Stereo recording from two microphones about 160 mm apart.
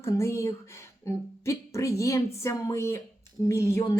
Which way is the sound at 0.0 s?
15° left (ahead or behind).